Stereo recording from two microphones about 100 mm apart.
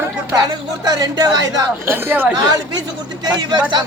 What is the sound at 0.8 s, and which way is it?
Speech, 40° right (ahead or behind).